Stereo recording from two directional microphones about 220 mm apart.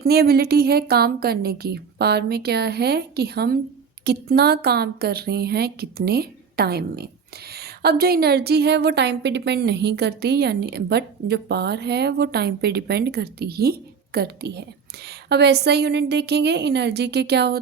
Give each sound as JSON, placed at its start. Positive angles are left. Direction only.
{"t": 0.0, "sound": "a woman's voice", "side_deg": -45}